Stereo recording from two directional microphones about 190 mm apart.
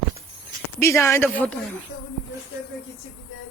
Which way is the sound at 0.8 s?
15° left (ahead or behind).